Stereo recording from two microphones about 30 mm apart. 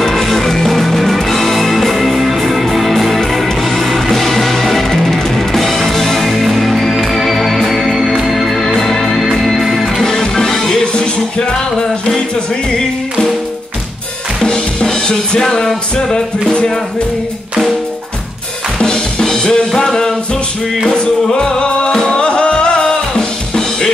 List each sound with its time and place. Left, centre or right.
0.0 s music: centre
8.6 s organ: centre
9.2 s music: centre
14.4 s music: left
18.8 s drum kit: left
20.9 s music: left